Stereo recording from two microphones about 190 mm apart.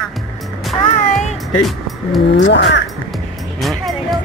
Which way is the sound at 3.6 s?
Centre (ahead or behind).